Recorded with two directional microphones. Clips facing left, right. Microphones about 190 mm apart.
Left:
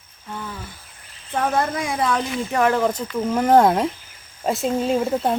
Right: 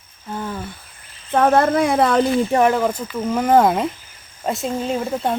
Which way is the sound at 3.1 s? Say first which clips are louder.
Even; 5° right (ahead or behind).